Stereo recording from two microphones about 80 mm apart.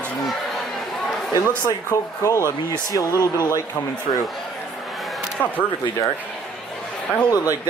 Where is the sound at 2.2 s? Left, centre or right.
Left.